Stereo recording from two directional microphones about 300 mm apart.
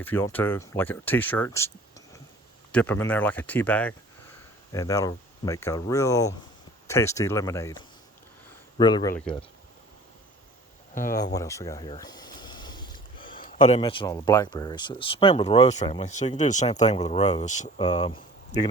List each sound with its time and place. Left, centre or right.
0.0 s speech: centre
2.7 s speech: centre
11.3 s a sound: centre
13.4 s speech: left